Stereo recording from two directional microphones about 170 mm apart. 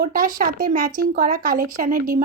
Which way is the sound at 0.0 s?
55° right (ahead or behind).